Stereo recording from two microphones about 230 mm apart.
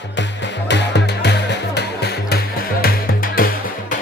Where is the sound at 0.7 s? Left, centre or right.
Left.